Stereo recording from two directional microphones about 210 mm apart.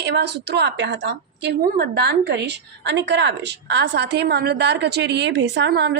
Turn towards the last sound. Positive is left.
turn(degrees=-55)  # may be behind; listen again after turning